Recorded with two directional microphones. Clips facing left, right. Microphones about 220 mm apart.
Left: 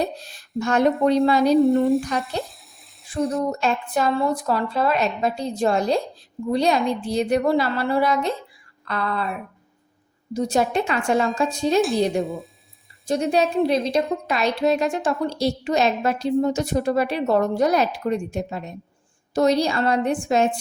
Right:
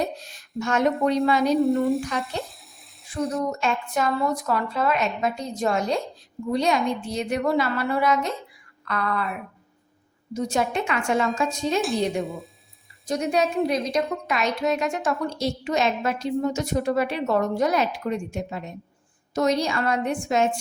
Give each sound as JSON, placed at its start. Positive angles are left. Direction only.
{"t": 0.0, "sound": "a woman's voice", "side_deg": 35}
{"t": 1.5, "sound": "frying", "side_deg": 0}
{"t": 3.0, "sound": "speech", "side_deg": 0}
{"t": 3.5, "sound": "a woman's voice", "side_deg": 35}
{"t": 8.8, "sound": "a sound", "side_deg": 30}
{"t": 10.3, "sound": "a woman's voice", "side_deg": 35}
{"t": 11.8, "sound": "frying", "side_deg": 0}
{"t": 13.1, "sound": "a woman's voice", "side_deg": 30}